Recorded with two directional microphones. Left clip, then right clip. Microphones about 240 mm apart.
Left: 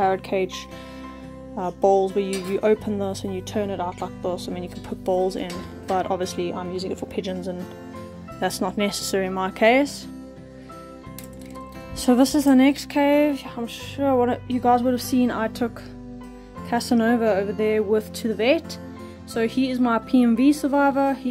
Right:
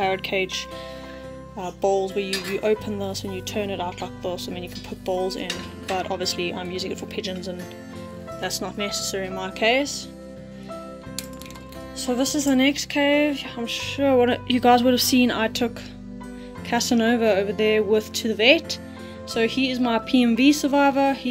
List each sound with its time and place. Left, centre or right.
0.0 s speech: centre
1.6 s speech: centre
12.0 s speech: left; by 21.3 s centre